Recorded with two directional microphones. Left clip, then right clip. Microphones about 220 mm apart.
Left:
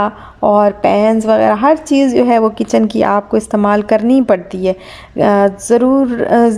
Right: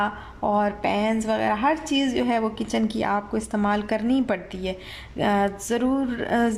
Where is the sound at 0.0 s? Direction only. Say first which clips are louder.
Left 11 dB; 25° left (ahead or behind).